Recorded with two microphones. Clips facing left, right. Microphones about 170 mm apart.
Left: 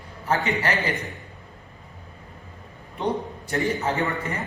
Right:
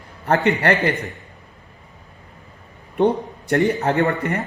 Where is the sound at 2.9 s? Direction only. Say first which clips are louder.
Right 8 dB; 60° right (ahead or behind).